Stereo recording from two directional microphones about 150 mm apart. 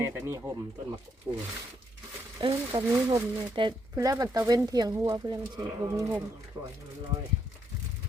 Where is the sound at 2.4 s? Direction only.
30° right (ahead or behind).